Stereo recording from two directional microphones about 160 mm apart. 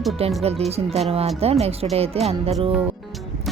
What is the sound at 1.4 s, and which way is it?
Speech, 40° right (ahead or behind).